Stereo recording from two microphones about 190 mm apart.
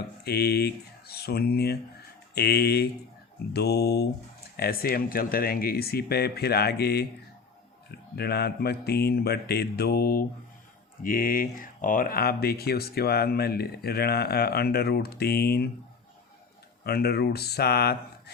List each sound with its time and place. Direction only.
0.3 s speech: 55° left (ahead or behind)
16.8 s speech: 55° left (ahead or behind)